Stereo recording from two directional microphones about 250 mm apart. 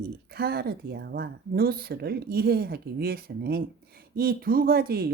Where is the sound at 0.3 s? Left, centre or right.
Right.